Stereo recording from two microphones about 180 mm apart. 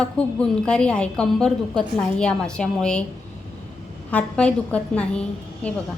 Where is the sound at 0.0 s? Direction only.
5° left (ahead or behind).